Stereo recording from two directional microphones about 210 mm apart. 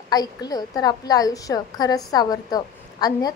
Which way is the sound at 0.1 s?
20° left (ahead or behind).